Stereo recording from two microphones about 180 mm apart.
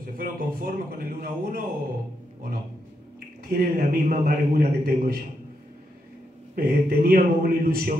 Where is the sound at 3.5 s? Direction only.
50° right (ahead or behind).